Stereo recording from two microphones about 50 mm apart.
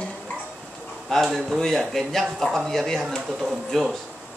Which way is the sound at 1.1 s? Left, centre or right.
Centre.